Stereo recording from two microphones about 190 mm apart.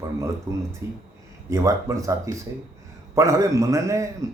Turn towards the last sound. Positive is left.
turn(degrees=-15)  # may be behind; listen again after turning